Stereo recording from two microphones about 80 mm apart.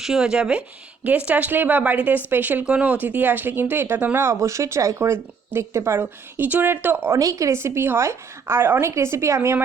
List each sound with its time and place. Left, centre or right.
0.0 s speech: centre; by 7.2 s right
7.2 s a woman's voice: right